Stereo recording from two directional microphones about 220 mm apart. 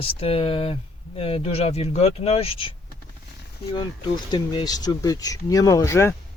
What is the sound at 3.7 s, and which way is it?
Speech, 20° left (ahead or behind).